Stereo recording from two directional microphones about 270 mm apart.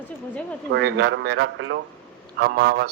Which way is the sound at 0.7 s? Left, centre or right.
Right.